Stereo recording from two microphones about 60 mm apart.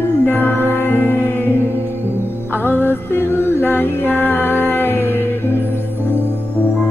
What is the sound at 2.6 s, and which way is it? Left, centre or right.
Music, left.